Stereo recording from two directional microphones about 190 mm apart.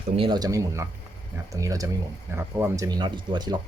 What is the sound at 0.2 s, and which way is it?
Speech, 25° right (ahead or behind).